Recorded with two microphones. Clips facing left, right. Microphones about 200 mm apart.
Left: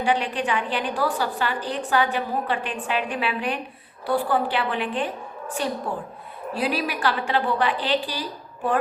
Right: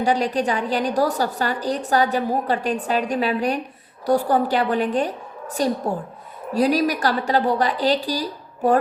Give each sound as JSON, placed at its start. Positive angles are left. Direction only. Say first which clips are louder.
{"t": 0.0, "sound": "a woman's voice", "louder": "right 4 dB", "side_deg": -40}